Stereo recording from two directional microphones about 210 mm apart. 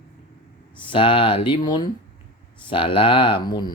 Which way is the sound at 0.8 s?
25° left (ahead or behind).